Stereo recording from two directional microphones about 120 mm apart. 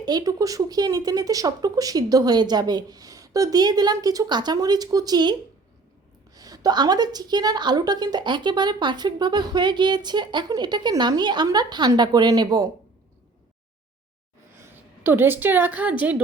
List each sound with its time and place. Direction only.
0.0 s speech: 35° right (ahead or behind)
14.6 s a woman's voice: 15° right (ahead or behind)